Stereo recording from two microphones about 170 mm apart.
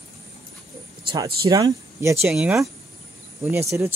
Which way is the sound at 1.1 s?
20° right (ahead or behind).